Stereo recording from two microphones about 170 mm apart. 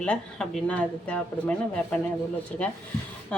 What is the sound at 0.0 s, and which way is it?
Speech, 5° left (ahead or behind).